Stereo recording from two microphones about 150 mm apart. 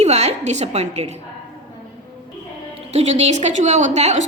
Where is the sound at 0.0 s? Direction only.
45° right (ahead or behind).